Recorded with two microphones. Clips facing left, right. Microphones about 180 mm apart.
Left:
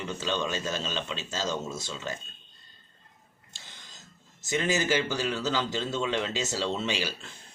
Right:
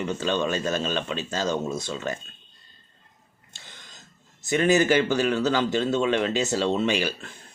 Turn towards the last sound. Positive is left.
turn(degrees=-55)  # may be behind; listen again after turning